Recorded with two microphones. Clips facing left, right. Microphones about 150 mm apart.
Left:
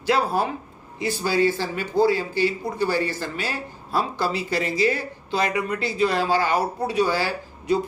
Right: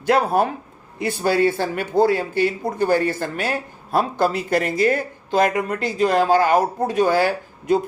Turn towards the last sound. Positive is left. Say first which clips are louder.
# right 3 dB
turn(degrees=-50)  # may be behind; listen again after turning